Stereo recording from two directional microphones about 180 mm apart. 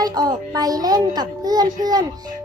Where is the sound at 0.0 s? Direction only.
20° right (ahead or behind).